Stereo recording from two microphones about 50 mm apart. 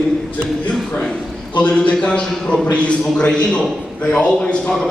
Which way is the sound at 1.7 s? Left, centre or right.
Left.